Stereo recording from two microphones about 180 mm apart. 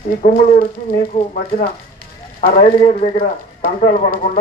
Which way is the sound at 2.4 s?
35° left (ahead or behind).